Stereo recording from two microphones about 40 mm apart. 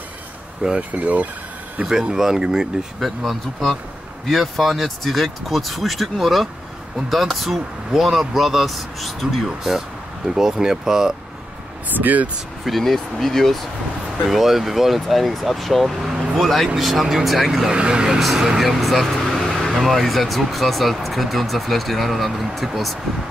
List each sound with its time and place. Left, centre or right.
0.7 s speech: right
1.9 s speech: centre
3.0 s speech: centre
12.0 s speech: right
12.6 s speech: centre
14.3 s speech: centre
17.6 s speech: right
18.2 s speech: centre